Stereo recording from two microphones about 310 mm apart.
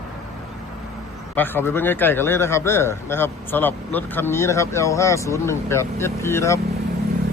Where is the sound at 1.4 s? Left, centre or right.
Centre.